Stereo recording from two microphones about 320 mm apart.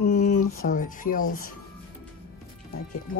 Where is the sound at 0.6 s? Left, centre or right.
Left.